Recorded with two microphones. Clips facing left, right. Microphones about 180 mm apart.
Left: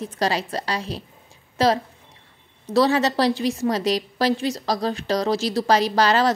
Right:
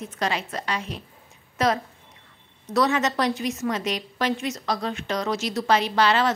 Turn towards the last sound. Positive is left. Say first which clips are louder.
# left 2 dB
turn(degrees=40)  # may be behind; listen again after turning